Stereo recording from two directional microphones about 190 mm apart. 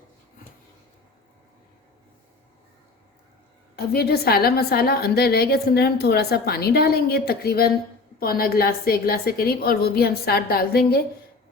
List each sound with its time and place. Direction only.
3.8 s a woman's voice: 55° left (ahead or behind)